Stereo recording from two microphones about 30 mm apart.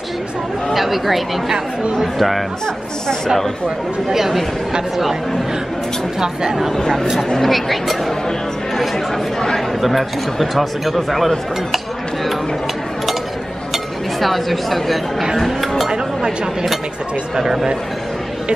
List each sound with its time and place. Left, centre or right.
0.7 s speech: centre
6.1 s speech: right
7.3 s speech: centre
9.8 s speech: centre
14.2 s speech: centre